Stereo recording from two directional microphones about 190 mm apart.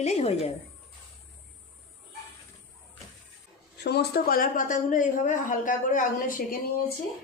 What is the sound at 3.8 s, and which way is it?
A woman's voice, 60° left (ahead or behind).